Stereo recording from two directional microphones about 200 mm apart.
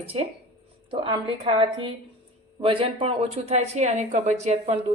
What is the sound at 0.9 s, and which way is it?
A woman's voice, 25° right (ahead or behind).